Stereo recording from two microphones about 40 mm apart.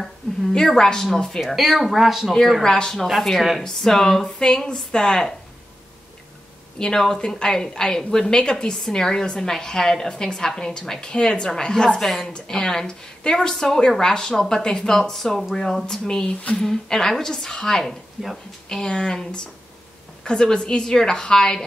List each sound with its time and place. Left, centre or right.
0.7 s a woman's voice: centre
1.4 s speech: centre
2.6 s a woman's voice: centre
3.1 s speech: centre
3.6 s a woman's voice: centre
6.8 s a woman's voice: centre
14.3 s speech: centre
14.6 s a woman's voice: centre
18.2 s speech: centre
18.7 s a woman's voice: centre